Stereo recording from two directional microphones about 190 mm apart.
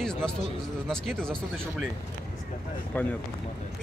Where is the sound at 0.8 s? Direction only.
Centre (ahead or behind).